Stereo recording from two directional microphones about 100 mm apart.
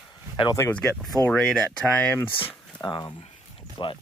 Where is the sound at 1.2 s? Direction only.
10° left (ahead or behind).